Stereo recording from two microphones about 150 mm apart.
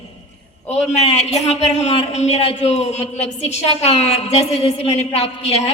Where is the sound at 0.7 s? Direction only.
45° left (ahead or behind).